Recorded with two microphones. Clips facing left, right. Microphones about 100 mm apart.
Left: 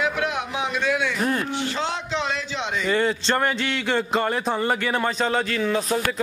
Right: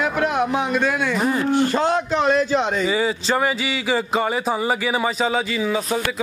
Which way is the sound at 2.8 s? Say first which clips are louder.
Right 1 dB; 5° right (ahead or behind).